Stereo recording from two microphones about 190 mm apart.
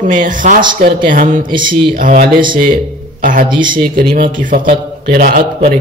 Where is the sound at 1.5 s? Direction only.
25° right (ahead or behind).